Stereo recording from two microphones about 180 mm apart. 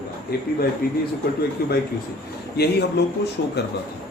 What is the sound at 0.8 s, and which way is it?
Speech, 55° left (ahead or behind).